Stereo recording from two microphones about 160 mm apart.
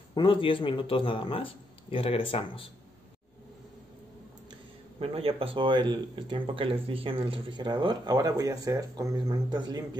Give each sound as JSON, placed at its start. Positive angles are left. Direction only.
{"t": 0.1, "sound": "speech", "side_deg": 30}
{"t": 4.9, "sound": "speech", "side_deg": -35}